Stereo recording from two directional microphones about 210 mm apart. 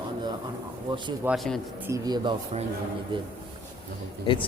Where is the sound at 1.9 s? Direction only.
20° right (ahead or behind).